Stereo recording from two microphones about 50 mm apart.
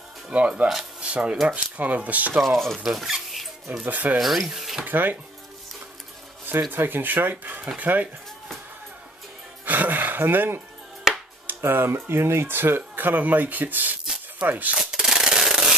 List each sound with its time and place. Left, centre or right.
0.3 s speech: right
1.5 s speech: right
2.4 s speech: centre
2.8 s speech: centre
3.8 s speech: right
4.2 s speech: centre
4.8 s speech: right
6.4 s speech: right
9.7 s a sound: right
11.4 s speech: right
14.8 s sanding: centre